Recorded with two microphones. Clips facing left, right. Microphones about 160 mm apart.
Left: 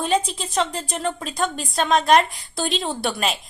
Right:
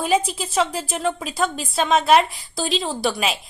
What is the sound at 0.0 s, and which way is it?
A woman's voice, 10° right (ahead or behind).